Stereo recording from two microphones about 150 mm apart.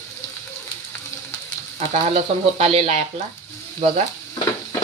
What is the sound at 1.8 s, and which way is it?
Speech, 45° right (ahead or behind).